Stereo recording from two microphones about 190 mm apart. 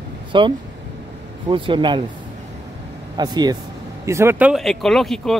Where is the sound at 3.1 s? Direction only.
20° right (ahead or behind).